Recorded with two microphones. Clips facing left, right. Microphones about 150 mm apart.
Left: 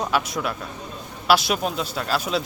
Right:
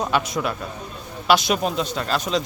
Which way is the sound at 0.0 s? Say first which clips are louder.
Right 2 dB; centre (ahead or behind).